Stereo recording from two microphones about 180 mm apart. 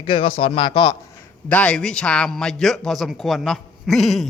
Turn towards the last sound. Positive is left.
turn(degrees=0)  # may be behind; listen again after turning